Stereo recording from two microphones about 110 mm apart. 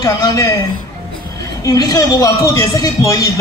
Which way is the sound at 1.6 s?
35° left (ahead or behind).